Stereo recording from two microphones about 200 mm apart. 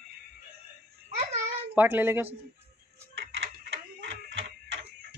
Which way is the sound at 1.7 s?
10° right (ahead or behind).